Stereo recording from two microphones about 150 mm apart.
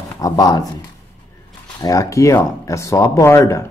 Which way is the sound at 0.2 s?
25° left (ahead or behind).